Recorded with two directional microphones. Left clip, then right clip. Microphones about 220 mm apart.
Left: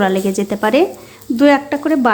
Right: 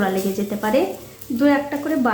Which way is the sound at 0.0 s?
45° left (ahead or behind).